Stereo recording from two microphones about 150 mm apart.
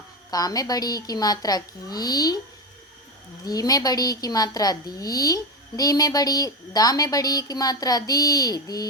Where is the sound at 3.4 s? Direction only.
25° left (ahead or behind).